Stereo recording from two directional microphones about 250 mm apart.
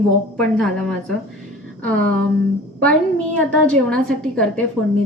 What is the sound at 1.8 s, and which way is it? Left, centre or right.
A woman's voice, centre.